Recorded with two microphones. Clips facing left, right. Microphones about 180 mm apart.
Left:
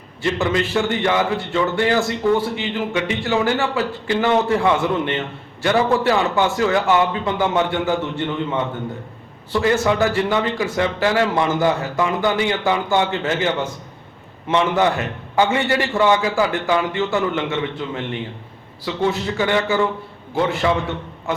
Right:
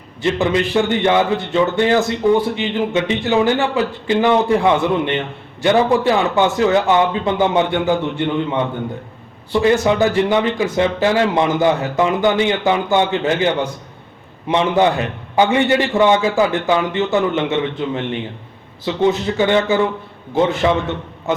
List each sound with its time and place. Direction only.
0.2 s a man's voice: 20° right (ahead or behind)
9.5 s a man's voice: 15° right (ahead or behind)